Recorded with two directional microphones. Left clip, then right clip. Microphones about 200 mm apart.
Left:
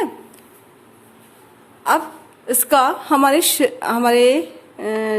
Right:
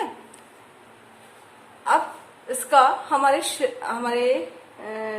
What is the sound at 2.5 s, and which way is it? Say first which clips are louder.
A woman's voice: left 2 dB; 50° left (ahead or behind).